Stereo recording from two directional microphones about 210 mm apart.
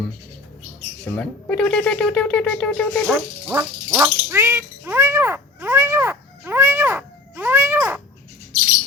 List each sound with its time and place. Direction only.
1.0 s speech: 5° left (ahead or behind)
3.5 s frog: 10° right (ahead or behind)